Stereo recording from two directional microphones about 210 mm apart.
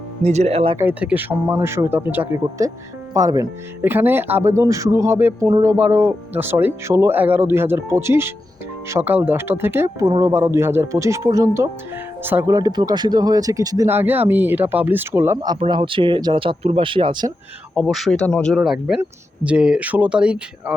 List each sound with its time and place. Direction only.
0.2 s speech: 30° right (ahead or behind)
0.8 s speech: 5° right (ahead or behind)
15.5 s speech: 25° right (ahead or behind)
17.7 s speech: centre (ahead or behind)